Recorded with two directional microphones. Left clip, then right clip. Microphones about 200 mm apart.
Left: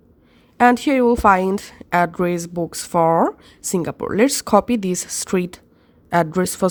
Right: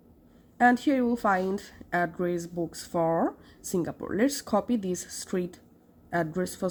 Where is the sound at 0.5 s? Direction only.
45° left (ahead or behind).